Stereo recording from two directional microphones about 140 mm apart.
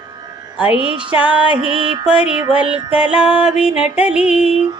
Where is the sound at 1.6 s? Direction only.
40° right (ahead or behind).